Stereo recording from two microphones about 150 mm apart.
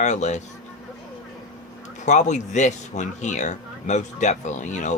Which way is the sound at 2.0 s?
50° left (ahead or behind).